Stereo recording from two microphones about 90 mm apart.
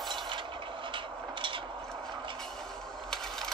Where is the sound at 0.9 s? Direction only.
65° right (ahead or behind).